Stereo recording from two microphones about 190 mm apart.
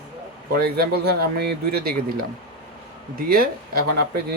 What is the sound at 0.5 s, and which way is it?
Speech, 55° right (ahead or behind).